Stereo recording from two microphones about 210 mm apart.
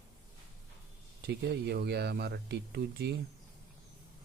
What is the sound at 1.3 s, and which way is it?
Speech, 50° right (ahead or behind).